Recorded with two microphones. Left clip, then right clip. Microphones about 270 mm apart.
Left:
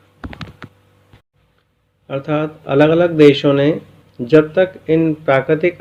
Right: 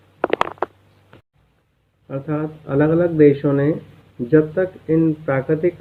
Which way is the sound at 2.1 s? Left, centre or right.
Left.